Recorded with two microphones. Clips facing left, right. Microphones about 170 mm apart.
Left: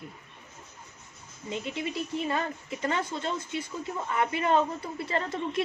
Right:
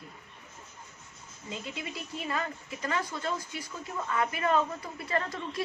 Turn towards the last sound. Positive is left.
turn(degrees=25)  # may be behind; listen again after turning